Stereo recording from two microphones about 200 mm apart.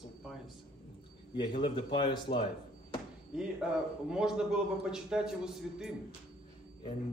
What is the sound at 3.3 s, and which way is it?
A man's voice, 5° right (ahead or behind).